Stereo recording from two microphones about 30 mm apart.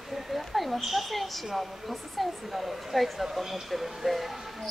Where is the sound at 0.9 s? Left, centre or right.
Centre.